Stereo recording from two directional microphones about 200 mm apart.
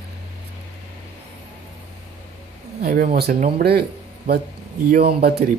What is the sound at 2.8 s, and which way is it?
Speech, 45° right (ahead or behind).